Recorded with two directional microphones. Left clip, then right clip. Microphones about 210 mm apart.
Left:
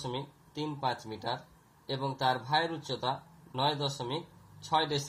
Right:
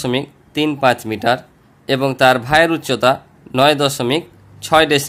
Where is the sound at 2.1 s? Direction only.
35° right (ahead or behind).